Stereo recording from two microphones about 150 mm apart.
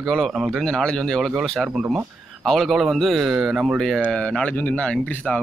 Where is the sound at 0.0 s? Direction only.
Centre (ahead or behind).